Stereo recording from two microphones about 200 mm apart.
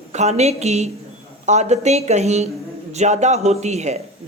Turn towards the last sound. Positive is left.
turn(degrees=-35)  # may be behind; listen again after turning